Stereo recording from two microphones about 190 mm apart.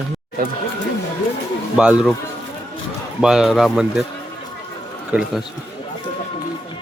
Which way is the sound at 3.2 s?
5° right (ahead or behind).